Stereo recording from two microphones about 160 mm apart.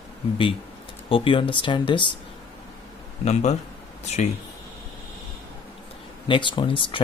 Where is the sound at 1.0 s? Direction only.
35° left (ahead or behind).